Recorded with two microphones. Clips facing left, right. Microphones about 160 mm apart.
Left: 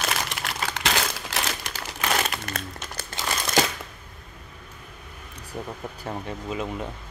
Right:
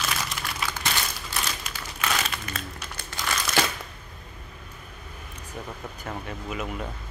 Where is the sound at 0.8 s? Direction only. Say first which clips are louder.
Left 4 dB; 90° left.